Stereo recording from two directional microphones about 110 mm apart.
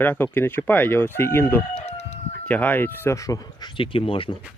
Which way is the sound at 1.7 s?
75° left (ahead or behind).